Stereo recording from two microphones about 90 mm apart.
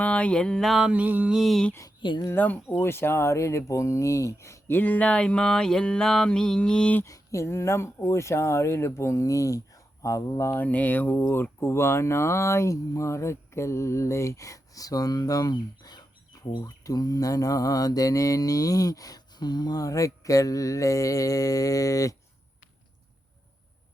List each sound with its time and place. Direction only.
0.0 s a sound: 15° left (ahead or behind); by 0.9 s 5° right (ahead or behind)
0.9 s mantra: 15° right (ahead or behind)
1.4 s a sound: centre (ahead or behind)
2.0 s speech: 65° left (ahead or behind)
2.3 s speech: 20° left (ahead or behind)
7.0 s speech: 35° left (ahead or behind)
10.6 s speech: 20° left (ahead or behind); by 22.1 s 40° left (ahead or behind)